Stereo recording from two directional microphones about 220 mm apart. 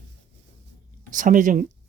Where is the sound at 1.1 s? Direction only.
35° right (ahead or behind).